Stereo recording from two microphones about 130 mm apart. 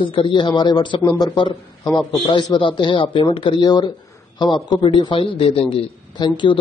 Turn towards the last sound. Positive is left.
turn(degrees=35)  # may be behind; listen again after turning